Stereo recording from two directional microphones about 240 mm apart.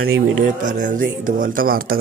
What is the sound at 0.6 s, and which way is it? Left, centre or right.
Speech, right.